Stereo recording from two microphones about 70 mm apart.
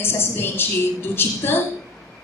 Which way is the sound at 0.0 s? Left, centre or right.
Left.